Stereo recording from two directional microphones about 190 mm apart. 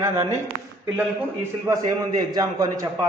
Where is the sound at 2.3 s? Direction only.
20° right (ahead or behind).